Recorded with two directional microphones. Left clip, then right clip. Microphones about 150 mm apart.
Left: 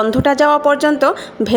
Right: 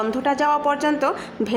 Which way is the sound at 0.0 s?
40° left (ahead or behind).